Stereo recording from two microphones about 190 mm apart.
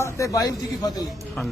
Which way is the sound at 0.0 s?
15° left (ahead or behind).